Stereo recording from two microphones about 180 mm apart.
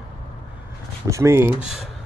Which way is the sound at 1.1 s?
15° right (ahead or behind).